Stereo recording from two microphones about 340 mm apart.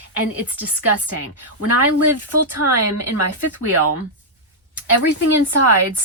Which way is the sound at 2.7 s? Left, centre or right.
Right.